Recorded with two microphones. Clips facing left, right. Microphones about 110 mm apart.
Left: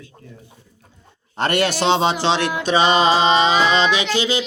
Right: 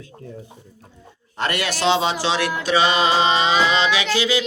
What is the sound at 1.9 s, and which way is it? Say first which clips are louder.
Music: even; 30° left (ahead or behind).